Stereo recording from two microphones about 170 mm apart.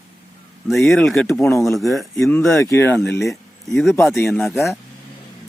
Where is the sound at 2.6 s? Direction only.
15° left (ahead or behind).